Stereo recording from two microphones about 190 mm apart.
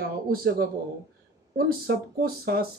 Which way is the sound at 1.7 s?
50° right (ahead or behind).